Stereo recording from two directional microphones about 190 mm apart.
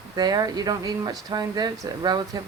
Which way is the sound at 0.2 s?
20° right (ahead or behind).